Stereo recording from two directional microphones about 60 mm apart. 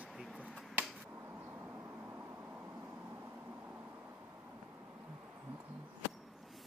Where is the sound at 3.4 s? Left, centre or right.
Right.